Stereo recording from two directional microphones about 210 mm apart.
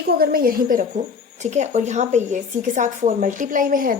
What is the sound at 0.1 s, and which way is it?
A woman's voice, 45° right (ahead or behind).